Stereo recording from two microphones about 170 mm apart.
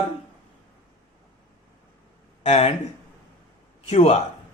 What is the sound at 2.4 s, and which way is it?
Speech, 40° left (ahead or behind).